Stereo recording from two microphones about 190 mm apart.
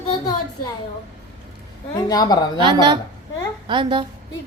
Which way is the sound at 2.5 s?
25° right (ahead or behind).